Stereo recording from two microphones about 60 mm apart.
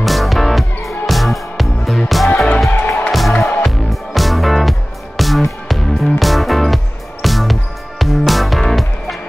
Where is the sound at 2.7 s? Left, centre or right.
Left.